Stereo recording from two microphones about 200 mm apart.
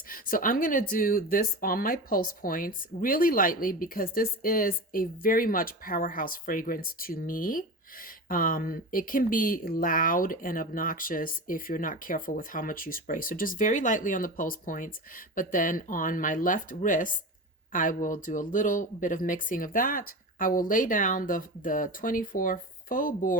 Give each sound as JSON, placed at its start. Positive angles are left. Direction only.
{"t": 0.1, "sound": "speech", "side_deg": 45}